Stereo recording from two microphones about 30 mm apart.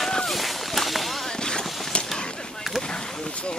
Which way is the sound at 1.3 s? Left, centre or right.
Left.